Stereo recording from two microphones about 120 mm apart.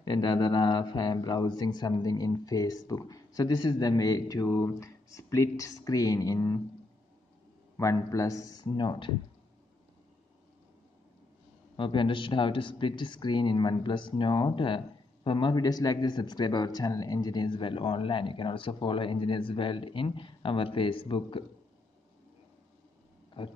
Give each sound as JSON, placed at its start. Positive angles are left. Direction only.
{"t": 0.0, "sound": "speech", "side_deg": 35}
{"t": 7.7, "sound": "speech", "side_deg": 25}
{"t": 11.7, "sound": "speech", "side_deg": 45}
{"t": 23.4, "sound": "speech", "side_deg": 45}